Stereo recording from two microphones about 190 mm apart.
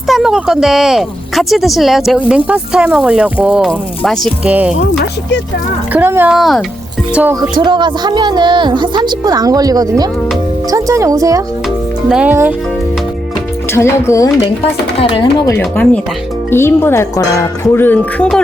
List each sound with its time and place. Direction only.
0.1 s speech: 5° right (ahead or behind)
5.9 s speech: 10° right (ahead or behind)
7.5 s a woman's voice: 25° right (ahead or behind)
12.0 s speech: 5° right (ahead or behind)
13.7 s speech: 15° left (ahead or behind)
15.0 s chopping: 25° left (ahead or behind)
15.5 s speech: 10° left (ahead or behind)